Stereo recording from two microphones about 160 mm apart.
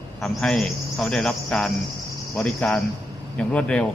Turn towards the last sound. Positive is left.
turn(degrees=5)  # may be behind; listen again after turning